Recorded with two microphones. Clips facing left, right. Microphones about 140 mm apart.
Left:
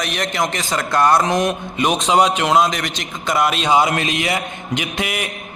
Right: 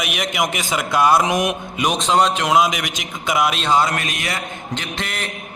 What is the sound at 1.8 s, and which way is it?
A man's voice, centre (ahead or behind).